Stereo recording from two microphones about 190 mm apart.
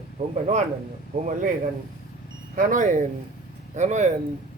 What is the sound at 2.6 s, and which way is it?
A man's voice, 45° right (ahead or behind).